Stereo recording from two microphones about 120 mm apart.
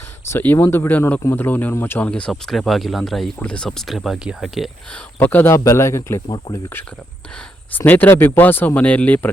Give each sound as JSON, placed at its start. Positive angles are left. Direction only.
{"t": 0.3, "sound": "speech", "side_deg": 20}
{"t": 5.2, "sound": "speech", "side_deg": 15}
{"t": 7.7, "sound": "speech", "side_deg": 15}